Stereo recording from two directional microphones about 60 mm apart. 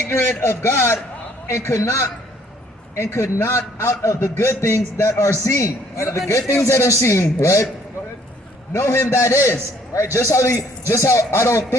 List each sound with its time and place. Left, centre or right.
0.1 s a man's voice: left
8.7 s a man's voice: left